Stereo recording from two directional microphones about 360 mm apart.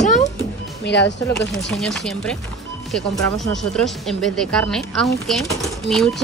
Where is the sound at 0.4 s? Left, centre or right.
Left.